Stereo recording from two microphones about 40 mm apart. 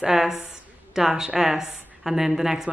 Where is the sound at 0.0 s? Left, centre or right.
Centre.